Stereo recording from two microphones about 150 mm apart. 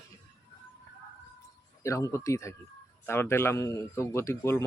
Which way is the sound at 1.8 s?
20° left (ahead or behind).